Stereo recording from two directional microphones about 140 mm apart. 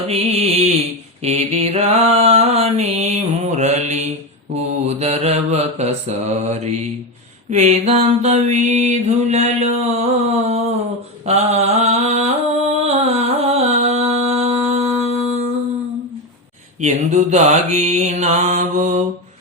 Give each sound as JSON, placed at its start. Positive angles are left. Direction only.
{"t": 0.1, "sound": "mantra", "side_deg": -50}
{"t": 12.8, "sound": "music", "side_deg": -50}
{"t": 16.8, "sound": "mantra", "side_deg": -60}